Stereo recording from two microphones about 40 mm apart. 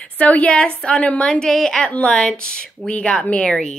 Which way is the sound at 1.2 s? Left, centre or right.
Centre.